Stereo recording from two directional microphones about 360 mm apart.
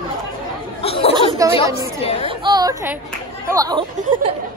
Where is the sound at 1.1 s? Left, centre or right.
Centre.